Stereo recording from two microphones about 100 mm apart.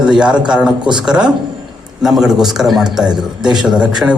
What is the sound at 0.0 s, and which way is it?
A man's voice, 5° right (ahead or behind).